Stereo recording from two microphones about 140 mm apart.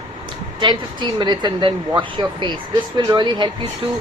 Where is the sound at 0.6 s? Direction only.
35° right (ahead or behind).